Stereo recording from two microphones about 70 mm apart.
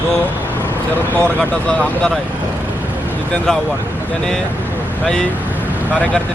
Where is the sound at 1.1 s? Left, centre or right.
Centre.